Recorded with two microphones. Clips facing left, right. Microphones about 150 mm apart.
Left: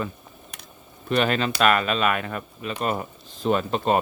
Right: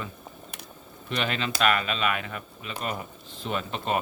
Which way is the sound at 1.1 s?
50° left (ahead or behind).